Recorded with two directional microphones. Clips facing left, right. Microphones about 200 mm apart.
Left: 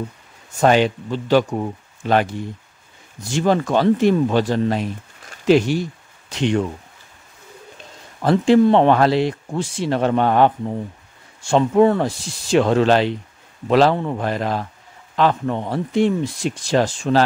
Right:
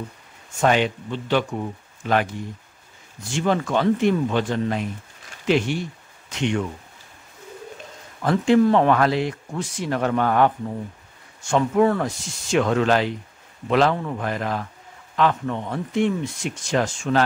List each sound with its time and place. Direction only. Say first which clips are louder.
0.6 s speech: left 4 dB; 35° left (ahead or behind)
3.3 s speech: left 4 dB; 40° left (ahead or behind)
8.2 s speech: left 3 dB; 30° left (ahead or behind)